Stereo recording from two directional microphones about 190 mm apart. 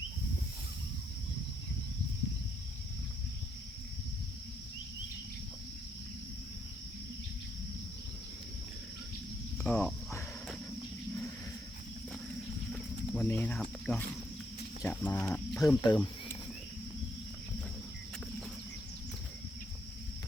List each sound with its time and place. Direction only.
9.6 s cricket: 10° left (ahead or behind)
12.7 s cricket: 10° left (ahead or behind)
14.8 s speech: 10° left (ahead or behind)
15.8 s cricket: 20° left (ahead or behind)